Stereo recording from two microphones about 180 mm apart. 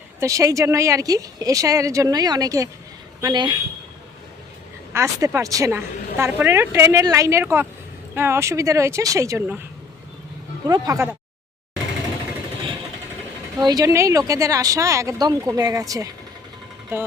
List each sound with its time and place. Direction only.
0.2 s a woman's voice: 15° right (ahead or behind)
4.9 s a woman's voice: 15° right (ahead or behind)
10.7 s a woman's voice: 20° right (ahead or behind)
13.6 s a woman's voice: 20° right (ahead or behind)